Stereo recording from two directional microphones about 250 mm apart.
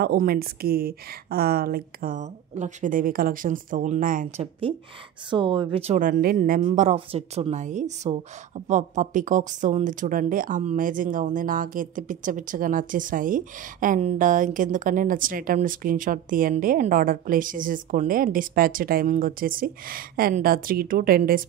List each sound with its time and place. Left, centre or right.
0.0 s a woman's voice: right